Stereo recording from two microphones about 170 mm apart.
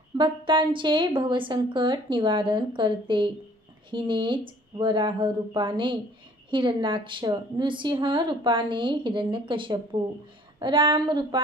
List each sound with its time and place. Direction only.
0.2 s a woman's voice: 30° right (ahead or behind)